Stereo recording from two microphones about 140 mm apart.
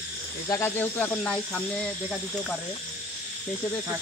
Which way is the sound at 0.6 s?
15° left (ahead or behind).